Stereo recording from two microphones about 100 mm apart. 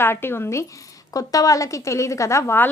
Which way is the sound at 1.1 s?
35° left (ahead or behind).